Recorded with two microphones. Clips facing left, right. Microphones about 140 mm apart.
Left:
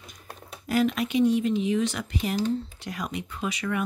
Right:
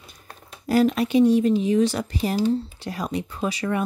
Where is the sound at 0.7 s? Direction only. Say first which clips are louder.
Right 5 dB; 35° right (ahead or behind).